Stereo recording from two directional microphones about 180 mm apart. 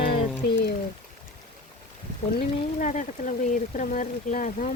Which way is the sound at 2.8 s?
45° left (ahead or behind).